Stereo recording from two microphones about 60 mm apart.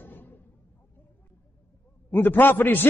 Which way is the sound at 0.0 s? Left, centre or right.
Left.